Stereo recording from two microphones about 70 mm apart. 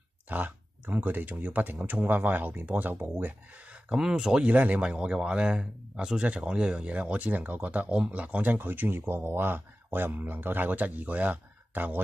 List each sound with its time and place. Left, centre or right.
0.3 s speech: right
3.9 s speech: centre; by 12.0 s right